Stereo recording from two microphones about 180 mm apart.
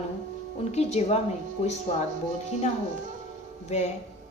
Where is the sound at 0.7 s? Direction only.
35° left (ahead or behind).